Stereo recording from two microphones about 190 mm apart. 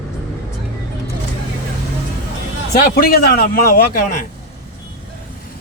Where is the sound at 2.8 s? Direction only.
50° left (ahead or behind).